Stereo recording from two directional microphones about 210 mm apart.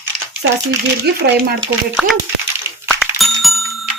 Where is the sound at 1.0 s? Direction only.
50° right (ahead or behind).